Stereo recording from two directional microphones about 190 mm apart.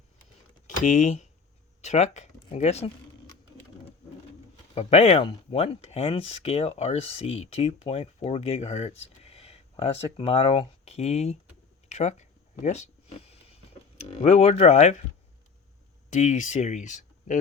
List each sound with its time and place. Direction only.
0.8 s speech: 40° left (ahead or behind)
4.7 s speech: 35° left (ahead or behind)
11.9 s a sound: 35° left (ahead or behind)
14.0 s speech: 35° left (ahead or behind)
16.0 s speech: 40° left (ahead or behind)